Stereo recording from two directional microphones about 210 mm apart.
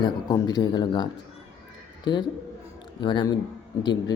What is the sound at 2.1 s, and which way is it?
Speech, 20° left (ahead or behind).